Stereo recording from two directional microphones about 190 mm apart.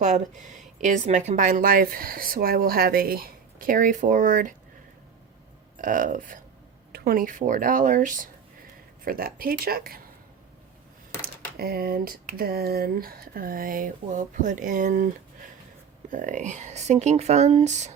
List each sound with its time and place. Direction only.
0.8 s speech: 40° right (ahead or behind)
5.7 s speech: 45° right (ahead or behind)
11.2 s speech: 55° right (ahead or behind)